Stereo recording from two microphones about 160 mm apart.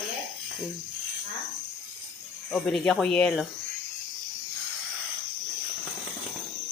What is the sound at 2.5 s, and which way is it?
Speech, centre (ahead or behind).